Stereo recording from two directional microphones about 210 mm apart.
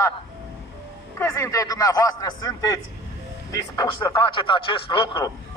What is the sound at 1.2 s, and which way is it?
A man's voice, 15° left (ahead or behind).